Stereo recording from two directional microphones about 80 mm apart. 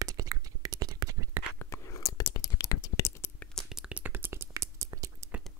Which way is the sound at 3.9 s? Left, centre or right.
Right.